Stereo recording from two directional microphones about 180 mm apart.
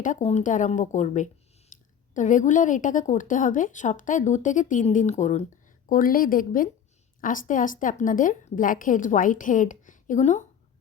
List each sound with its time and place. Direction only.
0.0 s a woman's voice: 40° left (ahead or behind)
5.9 s a woman's voice: 50° left (ahead or behind)